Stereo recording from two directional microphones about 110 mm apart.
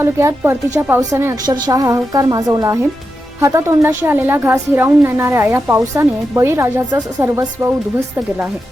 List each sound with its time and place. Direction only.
0.0 s a woman's voice: 25° right (ahead or behind)